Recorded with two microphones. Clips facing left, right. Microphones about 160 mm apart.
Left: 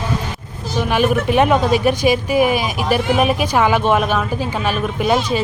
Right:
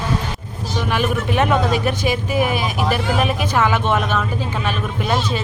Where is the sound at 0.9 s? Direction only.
15° left (ahead or behind).